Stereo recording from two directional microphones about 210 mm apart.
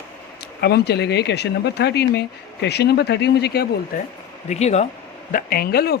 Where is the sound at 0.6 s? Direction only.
50° left (ahead or behind).